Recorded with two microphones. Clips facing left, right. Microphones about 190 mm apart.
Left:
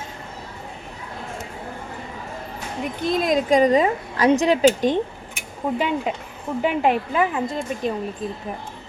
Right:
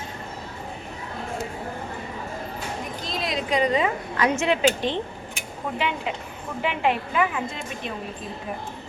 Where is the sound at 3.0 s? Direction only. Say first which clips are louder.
Left 10 dB; 50° left (ahead or behind).